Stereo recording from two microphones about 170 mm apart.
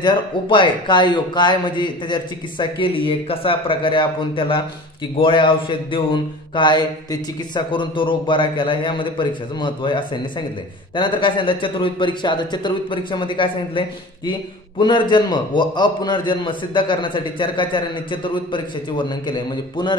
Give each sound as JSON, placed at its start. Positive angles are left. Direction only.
{"t": 0.0, "sound": "a man's voice", "side_deg": 30}